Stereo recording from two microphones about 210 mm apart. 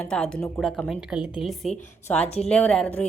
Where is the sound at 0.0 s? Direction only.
5° left (ahead or behind).